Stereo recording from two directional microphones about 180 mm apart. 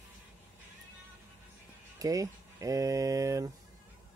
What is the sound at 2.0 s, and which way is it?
Speech, 20° right (ahead or behind).